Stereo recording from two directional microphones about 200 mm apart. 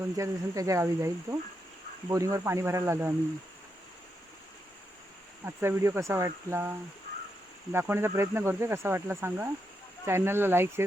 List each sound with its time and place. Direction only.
0.2 s speech: 15° right (ahead or behind)
5.5 s speech: 15° right (ahead or behind)